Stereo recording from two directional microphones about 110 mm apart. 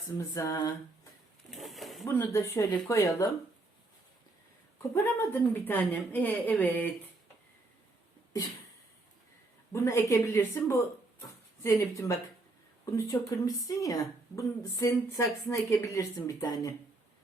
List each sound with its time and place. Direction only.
0.2 s speech: 30° left (ahead or behind)
1.5 s a sound: centre (ahead or behind)
2.0 s speech: 25° left (ahead or behind)
4.8 s a woman's voice: 20° left (ahead or behind)
9.7 s speech: 25° left (ahead or behind)